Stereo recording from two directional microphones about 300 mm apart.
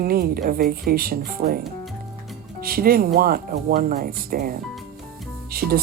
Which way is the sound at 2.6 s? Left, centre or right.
Right.